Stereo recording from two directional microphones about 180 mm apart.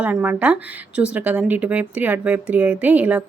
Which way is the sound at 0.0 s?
10° right (ahead or behind).